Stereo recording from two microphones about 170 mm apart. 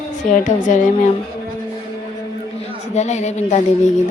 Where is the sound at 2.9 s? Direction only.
40° left (ahead or behind).